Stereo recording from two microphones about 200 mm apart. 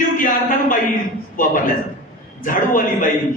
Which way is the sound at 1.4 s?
40° left (ahead or behind).